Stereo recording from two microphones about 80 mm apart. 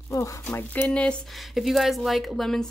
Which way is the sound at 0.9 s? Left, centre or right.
Centre.